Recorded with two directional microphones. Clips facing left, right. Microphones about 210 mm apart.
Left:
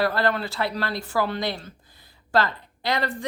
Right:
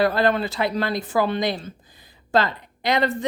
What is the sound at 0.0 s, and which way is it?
Speech, 20° right (ahead or behind).